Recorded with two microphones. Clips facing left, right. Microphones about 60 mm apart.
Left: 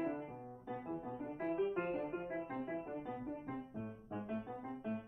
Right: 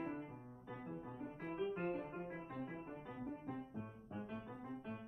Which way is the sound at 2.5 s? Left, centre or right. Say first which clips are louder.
Left 6 dB; left.